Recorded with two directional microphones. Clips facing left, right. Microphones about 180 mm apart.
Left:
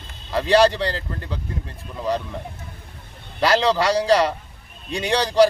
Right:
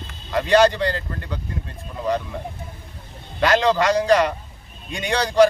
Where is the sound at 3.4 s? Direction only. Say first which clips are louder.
Right 1 dB; 35° left (ahead or behind).